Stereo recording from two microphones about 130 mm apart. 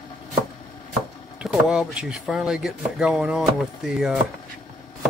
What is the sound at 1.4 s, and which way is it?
Speech, 5° right (ahead or behind).